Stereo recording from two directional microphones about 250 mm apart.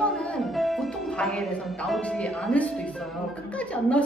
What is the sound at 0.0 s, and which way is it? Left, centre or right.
A woman's voice, centre.